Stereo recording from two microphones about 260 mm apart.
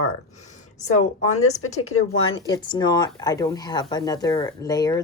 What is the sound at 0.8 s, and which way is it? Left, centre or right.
Speech, left.